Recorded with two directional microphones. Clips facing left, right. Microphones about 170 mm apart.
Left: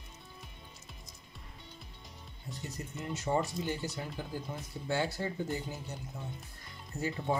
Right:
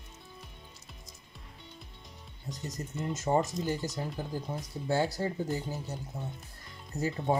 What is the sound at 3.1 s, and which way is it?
Speech, 40° right (ahead or behind).